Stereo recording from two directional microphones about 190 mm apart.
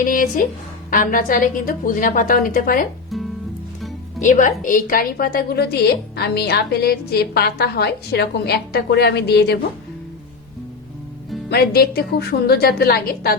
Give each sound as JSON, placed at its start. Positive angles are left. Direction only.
{"t": 0.0, "sound": "a woman's voice", "side_deg": 45}
{"t": 4.2, "sound": "a woman's voice", "side_deg": 40}
{"t": 11.4, "sound": "a woman's voice", "side_deg": 55}